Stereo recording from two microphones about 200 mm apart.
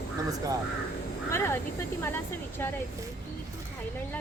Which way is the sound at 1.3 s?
15° left (ahead or behind).